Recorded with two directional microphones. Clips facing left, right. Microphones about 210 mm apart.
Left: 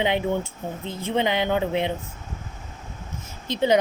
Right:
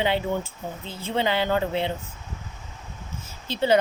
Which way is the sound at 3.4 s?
15° left (ahead or behind).